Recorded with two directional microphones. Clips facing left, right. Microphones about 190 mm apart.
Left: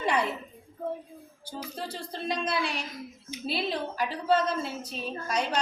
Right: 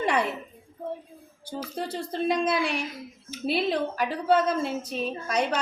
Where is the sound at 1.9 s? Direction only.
55° right (ahead or behind).